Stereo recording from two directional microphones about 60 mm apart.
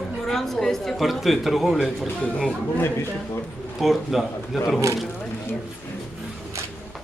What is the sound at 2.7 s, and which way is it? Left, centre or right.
Speech, left.